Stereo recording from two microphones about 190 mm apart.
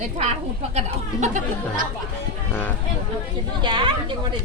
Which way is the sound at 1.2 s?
40° right (ahead or behind).